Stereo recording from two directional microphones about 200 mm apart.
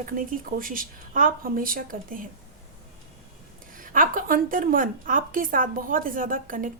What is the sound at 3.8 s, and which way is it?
A woman's voice, 45° right (ahead or behind).